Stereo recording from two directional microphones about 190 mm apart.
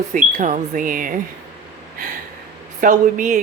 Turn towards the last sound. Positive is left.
turn(degrees=-40)  # may be behind; listen again after turning